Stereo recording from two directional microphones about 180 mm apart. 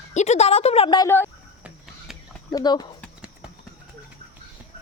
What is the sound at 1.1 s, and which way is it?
Speech, 15° left (ahead or behind).